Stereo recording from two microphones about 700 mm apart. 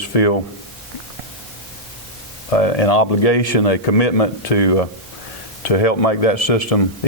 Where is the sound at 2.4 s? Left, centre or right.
Left.